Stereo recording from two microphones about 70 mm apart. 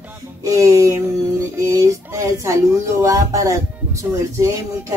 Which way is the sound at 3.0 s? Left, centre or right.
Right.